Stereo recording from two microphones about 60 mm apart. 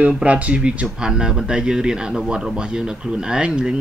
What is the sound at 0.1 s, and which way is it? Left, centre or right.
Speech, right.